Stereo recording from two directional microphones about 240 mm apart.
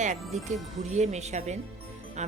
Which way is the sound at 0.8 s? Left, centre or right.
Right.